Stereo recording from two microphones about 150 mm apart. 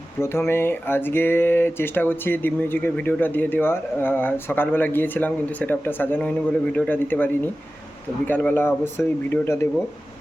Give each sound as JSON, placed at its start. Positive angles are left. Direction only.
{"t": 0.2, "sound": "speech", "side_deg": 15}